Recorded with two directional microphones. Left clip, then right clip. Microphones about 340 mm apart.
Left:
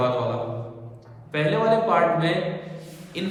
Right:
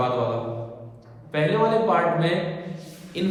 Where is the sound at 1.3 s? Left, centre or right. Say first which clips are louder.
Even; centre.